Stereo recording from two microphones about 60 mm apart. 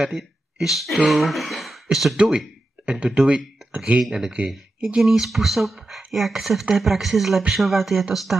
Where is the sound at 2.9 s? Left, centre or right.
Centre.